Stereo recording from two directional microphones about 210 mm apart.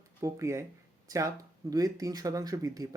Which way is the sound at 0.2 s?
15° right (ahead or behind).